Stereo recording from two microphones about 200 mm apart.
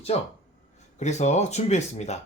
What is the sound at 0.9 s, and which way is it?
Speech, 35° left (ahead or behind).